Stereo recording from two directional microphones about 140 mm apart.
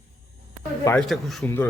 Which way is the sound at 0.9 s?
Centre (ahead or behind).